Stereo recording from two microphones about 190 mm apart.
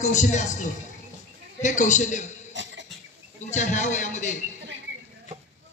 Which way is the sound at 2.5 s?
70° right (ahead or behind).